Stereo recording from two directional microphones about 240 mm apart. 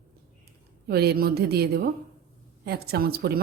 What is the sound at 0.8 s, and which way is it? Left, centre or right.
A woman's voice, right.